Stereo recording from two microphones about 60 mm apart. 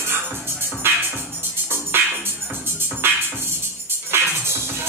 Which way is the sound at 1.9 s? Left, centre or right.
Right.